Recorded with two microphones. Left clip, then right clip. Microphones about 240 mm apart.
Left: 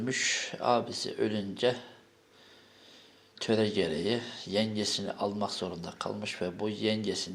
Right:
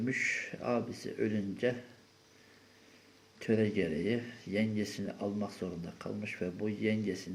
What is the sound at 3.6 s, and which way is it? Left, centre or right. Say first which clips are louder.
Speech: left 3 dB; left.